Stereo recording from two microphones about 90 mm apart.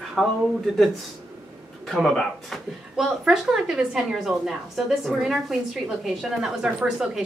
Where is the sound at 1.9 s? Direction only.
Centre (ahead or behind).